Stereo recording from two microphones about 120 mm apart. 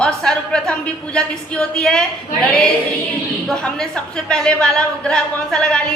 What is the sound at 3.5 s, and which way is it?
A woman's voice, 5° left (ahead or behind).